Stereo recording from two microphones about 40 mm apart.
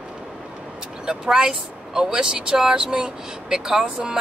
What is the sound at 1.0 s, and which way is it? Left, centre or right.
Speech, centre.